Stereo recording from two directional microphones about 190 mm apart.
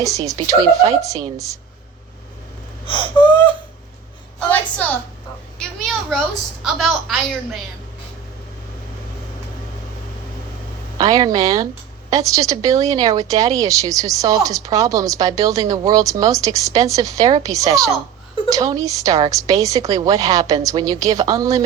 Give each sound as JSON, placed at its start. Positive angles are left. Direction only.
{"t": 0.0, "sound": "speech", "side_deg": -15}
{"t": 2.8, "sound": "gasp", "side_deg": 25}
{"t": 4.4, "sound": "a sound", "side_deg": 10}
{"t": 5.8, "sound": "a woman's voice", "side_deg": 0}
{"t": 10.9, "sound": "speech", "side_deg": -20}